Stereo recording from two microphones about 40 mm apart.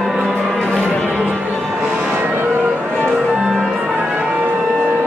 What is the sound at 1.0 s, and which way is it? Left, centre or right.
Music, right.